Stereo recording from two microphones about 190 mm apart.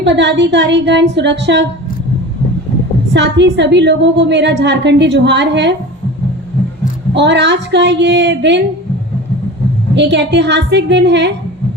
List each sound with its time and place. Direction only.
0.0 s a woman's voice: 65° right (ahead or behind)
3.1 s a woman's voice: 65° right (ahead or behind)
7.1 s a woman's voice: 65° right (ahead or behind)
9.9 s a woman's voice: 65° right (ahead or behind)